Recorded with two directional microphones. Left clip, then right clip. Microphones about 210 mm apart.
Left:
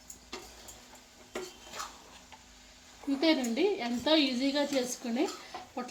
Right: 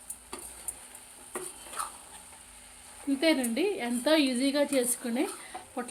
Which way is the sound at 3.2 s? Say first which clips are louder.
Right 1 dB; 25° right (ahead or behind).